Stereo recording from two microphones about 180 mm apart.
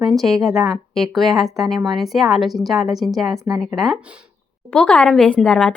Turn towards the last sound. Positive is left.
turn(degrees=5)  # may be behind; listen again after turning